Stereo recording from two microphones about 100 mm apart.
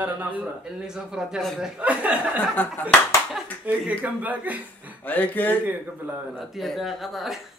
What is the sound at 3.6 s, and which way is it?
A man's voice, 15° right (ahead or behind).